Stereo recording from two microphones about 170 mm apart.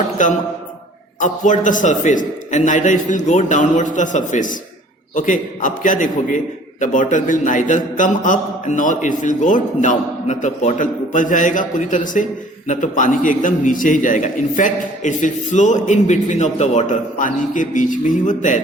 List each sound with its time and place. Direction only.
0.2 s a man's voice: 50° left (ahead or behind)